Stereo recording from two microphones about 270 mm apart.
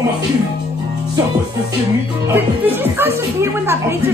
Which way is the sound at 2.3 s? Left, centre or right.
Centre.